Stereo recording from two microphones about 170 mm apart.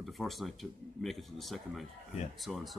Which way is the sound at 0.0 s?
Centre (ahead or behind).